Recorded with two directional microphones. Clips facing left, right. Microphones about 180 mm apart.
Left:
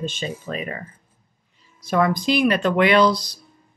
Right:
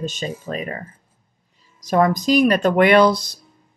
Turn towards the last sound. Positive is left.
turn(degrees=-50)  # may be behind; listen again after turning